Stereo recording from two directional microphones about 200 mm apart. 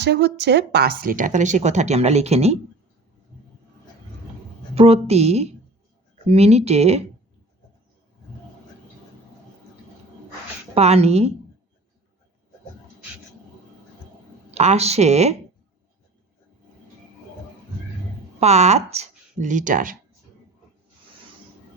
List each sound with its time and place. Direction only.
0.0 s speech: 60° right (ahead or behind); by 2.6 s 30° right (ahead or behind)
4.7 s speech: 30° right (ahead or behind)
10.8 s speech: 30° right (ahead or behind)
14.5 s speech: 35° right (ahead or behind)
18.3 s speech: 35° right (ahead or behind)